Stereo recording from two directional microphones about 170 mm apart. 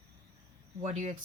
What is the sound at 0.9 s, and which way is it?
Speech, 45° right (ahead or behind).